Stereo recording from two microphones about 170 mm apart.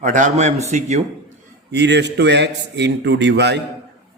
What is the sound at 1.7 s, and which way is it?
A man's voice, 85° right.